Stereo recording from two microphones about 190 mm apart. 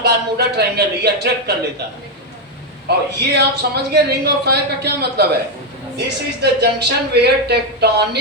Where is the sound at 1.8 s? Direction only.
60° right (ahead or behind).